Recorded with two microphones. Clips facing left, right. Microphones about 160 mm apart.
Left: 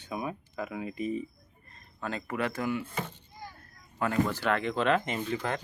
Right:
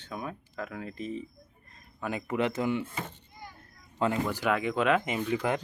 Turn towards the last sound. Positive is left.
turn(degrees=-15)  # may be behind; listen again after turning